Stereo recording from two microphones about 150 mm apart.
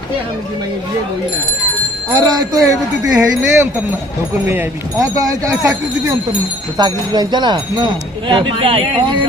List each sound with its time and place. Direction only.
2.1 s speech: 25° right (ahead or behind)
3.2 s wind chime: 20° right (ahead or behind)
4.4 s speech: 20° right (ahead or behind); by 8.8 s 35° right (ahead or behind)